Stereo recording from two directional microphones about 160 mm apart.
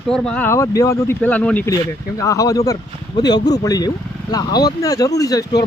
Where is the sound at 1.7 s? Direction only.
20° left (ahead or behind).